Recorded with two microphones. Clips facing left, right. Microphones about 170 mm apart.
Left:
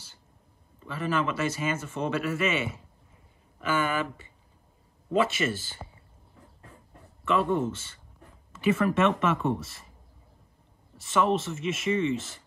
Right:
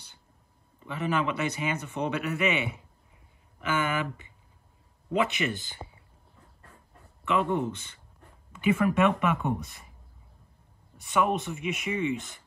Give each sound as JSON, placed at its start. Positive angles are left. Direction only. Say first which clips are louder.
{"t": 0.7, "sound": "a man's voice", "louder": "even", "side_deg": -15}
{"t": 7.2, "sound": "a man's voice", "louder": "left 1 dB", "side_deg": -15}
{"t": 11.0, "sound": "a man's voice", "louder": "left 1 dB", "side_deg": -15}